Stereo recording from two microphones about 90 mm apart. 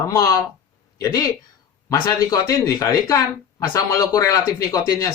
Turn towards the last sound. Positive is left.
turn(degrees=40)  # may be behind; listen again after turning